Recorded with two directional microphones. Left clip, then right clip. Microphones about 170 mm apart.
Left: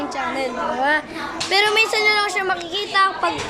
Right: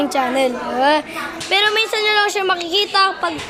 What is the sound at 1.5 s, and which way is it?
Speech, centre (ahead or behind).